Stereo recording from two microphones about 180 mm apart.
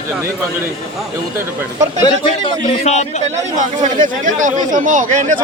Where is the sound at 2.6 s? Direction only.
40° left (ahead or behind).